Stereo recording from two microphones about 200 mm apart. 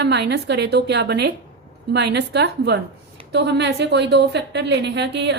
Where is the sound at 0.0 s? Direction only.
60° right (ahead or behind).